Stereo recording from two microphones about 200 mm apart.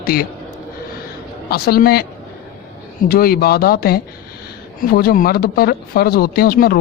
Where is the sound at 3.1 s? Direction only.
50° left (ahead or behind).